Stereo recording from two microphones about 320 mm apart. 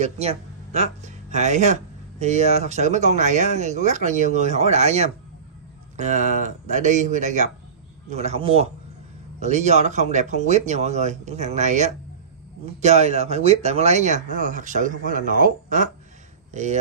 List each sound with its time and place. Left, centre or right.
0.0 s speech: centre